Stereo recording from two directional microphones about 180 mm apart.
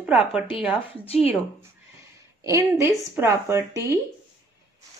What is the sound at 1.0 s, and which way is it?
Speech, 35° left (ahead or behind).